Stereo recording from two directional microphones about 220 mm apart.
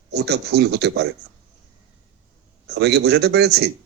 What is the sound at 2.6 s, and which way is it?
Speech, 50° right (ahead or behind).